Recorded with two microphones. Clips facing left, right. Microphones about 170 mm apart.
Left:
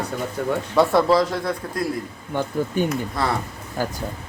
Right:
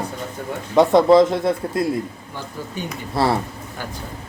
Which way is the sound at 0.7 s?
20° right (ahead or behind).